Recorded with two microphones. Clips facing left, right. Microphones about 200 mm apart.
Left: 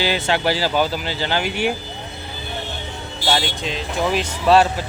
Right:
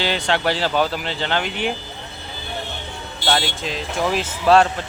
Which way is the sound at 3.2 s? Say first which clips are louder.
Even; centre (ahead or behind).